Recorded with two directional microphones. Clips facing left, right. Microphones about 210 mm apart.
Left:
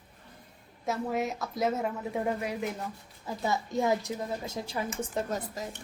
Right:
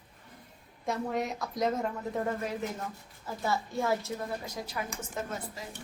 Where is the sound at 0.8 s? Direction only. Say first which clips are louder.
Left 1 dB; 5° left (ahead or behind); by 4.8 s 25° left (ahead or behind).